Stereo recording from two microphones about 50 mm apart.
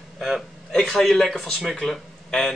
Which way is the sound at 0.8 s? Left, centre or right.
Centre.